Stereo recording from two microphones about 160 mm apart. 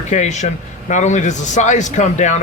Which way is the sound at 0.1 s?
45° left (ahead or behind).